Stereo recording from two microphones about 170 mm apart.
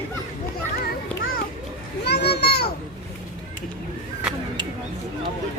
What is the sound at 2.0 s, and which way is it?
Children playing, 80° left.